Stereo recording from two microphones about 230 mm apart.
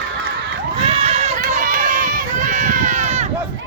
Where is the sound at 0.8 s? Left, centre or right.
Right.